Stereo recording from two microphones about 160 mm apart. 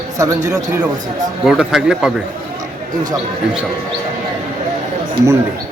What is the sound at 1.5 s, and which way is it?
Speech, 5° right (ahead or behind).